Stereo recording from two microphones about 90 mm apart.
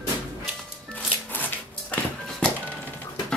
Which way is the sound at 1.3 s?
20° left (ahead or behind).